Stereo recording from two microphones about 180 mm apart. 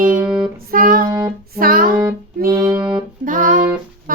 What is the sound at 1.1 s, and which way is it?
Music, 15° right (ahead or behind).